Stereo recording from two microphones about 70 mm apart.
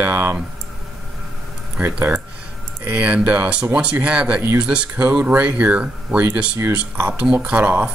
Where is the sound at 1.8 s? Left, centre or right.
Right.